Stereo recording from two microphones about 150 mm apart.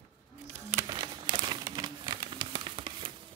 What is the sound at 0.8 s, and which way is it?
Crumpling, 30° right (ahead or behind).